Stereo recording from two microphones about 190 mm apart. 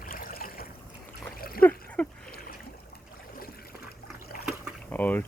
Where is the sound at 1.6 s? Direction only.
10° left (ahead or behind).